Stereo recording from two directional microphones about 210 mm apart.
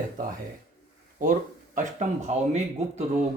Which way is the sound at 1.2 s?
40° right (ahead or behind).